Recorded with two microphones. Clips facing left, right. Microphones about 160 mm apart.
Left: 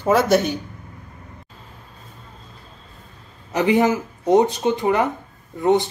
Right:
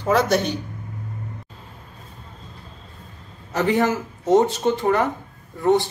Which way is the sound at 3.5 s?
15° left (ahead or behind).